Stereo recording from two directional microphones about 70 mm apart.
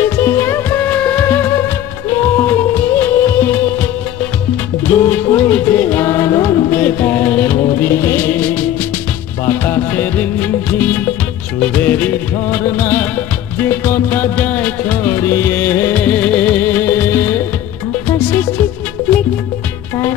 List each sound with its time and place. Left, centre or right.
0.0 s music: left
0.7 s music: left
6.7 s music: left
7.8 s music: left
8.3 s music: left
15.2 s music: left
16.0 s music: centre